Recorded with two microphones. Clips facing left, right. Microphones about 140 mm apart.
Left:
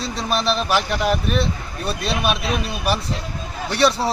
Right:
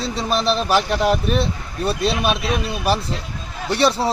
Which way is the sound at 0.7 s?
30° right (ahead or behind).